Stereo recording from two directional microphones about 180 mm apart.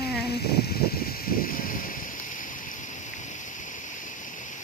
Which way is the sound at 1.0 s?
55° left (ahead or behind).